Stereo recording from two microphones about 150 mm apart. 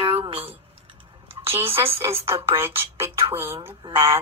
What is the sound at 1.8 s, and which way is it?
Speech, 15° right (ahead or behind).